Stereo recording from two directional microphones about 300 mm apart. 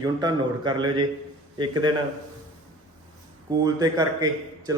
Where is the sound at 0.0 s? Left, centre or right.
Centre.